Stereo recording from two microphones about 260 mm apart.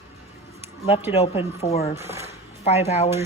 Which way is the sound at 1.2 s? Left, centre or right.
Left.